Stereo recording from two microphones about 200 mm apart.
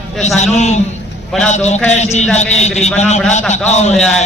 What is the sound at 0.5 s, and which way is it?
A man's voice, 35° left (ahead or behind).